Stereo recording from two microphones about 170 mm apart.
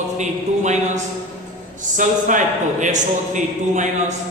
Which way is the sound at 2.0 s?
50° right (ahead or behind).